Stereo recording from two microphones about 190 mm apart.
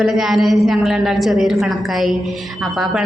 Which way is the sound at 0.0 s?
Centre (ahead or behind).